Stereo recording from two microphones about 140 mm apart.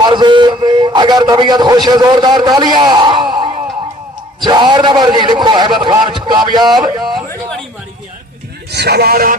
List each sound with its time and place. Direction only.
0.0 s speech: 30° right (ahead or behind)
7.2 s a sound: 10° left (ahead or behind)
9.0 s music: 90° right